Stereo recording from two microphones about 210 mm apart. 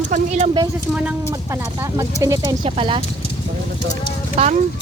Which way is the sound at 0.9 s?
5° right (ahead or behind).